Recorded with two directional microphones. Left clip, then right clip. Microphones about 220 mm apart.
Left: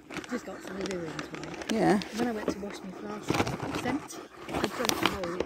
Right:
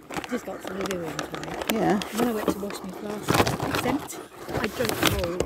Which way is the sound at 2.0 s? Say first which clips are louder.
Right 6 dB; 25° right (ahead or behind).